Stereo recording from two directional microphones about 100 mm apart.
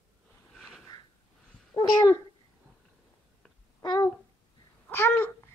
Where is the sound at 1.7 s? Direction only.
30° left (ahead or behind).